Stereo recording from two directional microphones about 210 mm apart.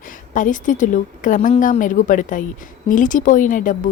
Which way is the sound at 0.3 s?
40° left (ahead or behind).